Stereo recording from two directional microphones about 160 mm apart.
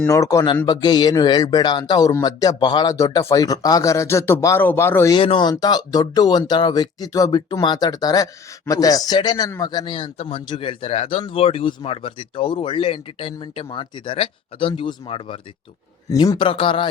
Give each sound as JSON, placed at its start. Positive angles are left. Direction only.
{"t": 0.1, "sound": "speech", "side_deg": 20}
{"t": 5.1, "sound": "speech", "side_deg": 30}